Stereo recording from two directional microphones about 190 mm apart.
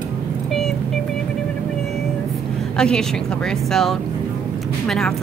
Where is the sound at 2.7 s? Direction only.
5° left (ahead or behind).